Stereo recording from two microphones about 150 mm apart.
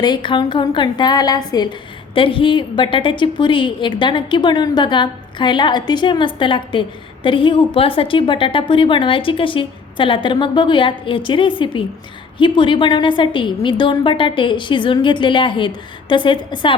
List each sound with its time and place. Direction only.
0.0 s a woman's voice: 30° left (ahead or behind)